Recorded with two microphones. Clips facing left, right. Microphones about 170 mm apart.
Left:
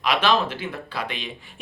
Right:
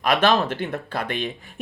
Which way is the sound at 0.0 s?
50° right (ahead or behind).